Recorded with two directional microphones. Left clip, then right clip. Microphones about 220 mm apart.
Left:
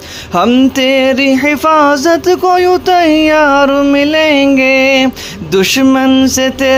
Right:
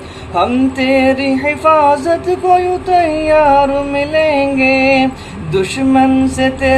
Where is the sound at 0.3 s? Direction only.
50° left (ahead or behind).